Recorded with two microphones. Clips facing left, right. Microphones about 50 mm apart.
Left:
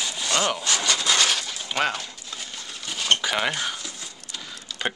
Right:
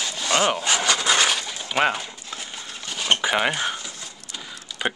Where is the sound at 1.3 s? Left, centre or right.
Centre.